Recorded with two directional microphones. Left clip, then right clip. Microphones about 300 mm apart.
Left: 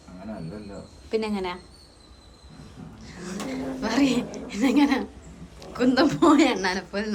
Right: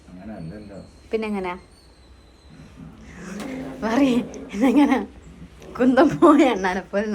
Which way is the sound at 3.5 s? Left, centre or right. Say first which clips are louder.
Right 3 dB; centre.